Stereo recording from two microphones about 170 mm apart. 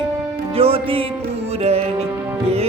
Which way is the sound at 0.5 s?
35° right (ahead or behind).